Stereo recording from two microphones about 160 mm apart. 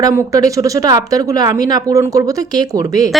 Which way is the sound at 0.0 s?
20° right (ahead or behind).